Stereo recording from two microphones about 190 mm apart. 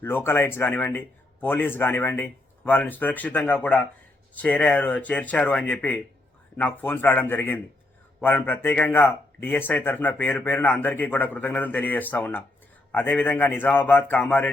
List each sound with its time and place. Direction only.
0.0 s a man's voice: 10° left (ahead or behind)